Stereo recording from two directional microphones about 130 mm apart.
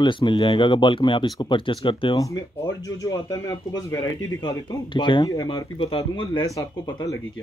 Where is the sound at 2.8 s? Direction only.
25° left (ahead or behind).